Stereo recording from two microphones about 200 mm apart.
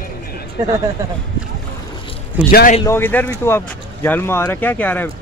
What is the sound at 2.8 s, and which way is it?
Speech, 10° left (ahead or behind).